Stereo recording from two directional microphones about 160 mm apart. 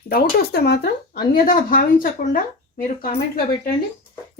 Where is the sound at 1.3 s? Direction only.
60° left (ahead or behind).